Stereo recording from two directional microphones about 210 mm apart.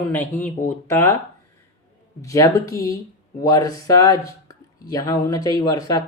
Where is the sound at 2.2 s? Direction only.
15° left (ahead or behind).